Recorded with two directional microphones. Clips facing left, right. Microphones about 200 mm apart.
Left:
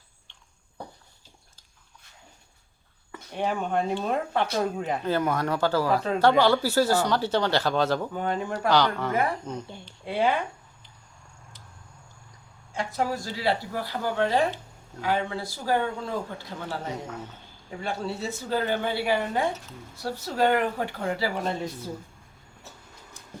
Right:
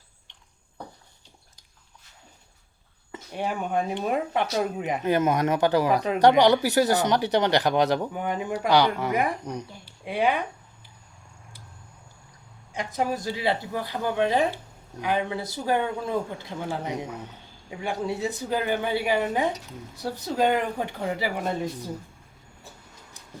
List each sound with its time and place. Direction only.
3.3 s speech: 10° right (ahead or behind)
12.7 s speech: 15° right (ahead or behind)